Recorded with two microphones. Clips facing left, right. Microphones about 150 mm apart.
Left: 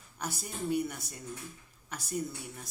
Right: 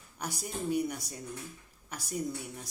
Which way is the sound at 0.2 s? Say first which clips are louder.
Right 1 dB; 15° right (ahead or behind).